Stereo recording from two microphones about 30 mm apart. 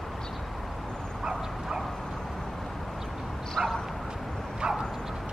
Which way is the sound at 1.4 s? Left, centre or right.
Centre.